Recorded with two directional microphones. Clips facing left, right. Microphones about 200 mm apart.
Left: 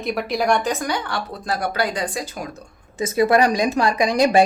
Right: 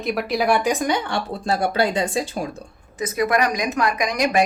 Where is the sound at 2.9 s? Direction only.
25° left (ahead or behind).